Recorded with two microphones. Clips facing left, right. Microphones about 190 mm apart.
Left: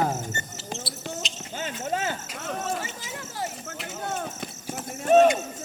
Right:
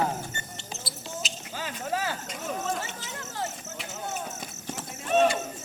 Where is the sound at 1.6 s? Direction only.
25° left (ahead or behind).